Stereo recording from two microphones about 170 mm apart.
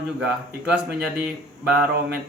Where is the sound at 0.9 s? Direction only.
5° right (ahead or behind).